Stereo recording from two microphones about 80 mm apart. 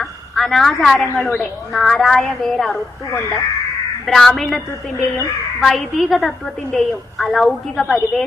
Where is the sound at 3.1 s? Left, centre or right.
Left.